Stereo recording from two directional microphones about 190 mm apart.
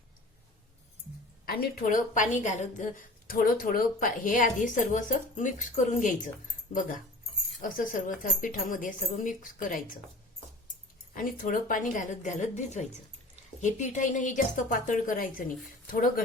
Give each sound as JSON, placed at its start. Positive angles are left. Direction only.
{"t": 1.5, "sound": "a woman's voice", "side_deg": 50}
{"t": 11.1, "sound": "a woman's voice", "side_deg": 45}